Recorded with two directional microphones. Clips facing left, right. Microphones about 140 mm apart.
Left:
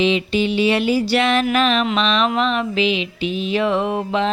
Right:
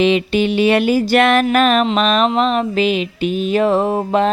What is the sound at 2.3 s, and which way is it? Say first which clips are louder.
Mantra: right 4 dB; 40° right (ahead or behind).